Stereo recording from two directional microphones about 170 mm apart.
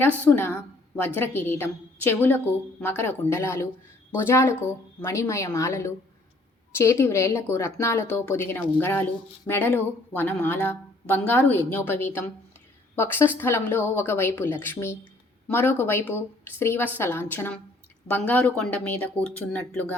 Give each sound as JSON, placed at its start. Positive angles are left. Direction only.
{"t": 0.0, "sound": "a woman's voice", "side_deg": 10}